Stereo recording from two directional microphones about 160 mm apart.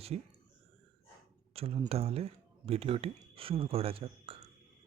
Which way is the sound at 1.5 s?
40° right (ahead or behind).